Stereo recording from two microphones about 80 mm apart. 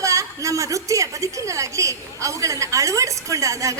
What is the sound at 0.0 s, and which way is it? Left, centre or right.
A woman's voice, right.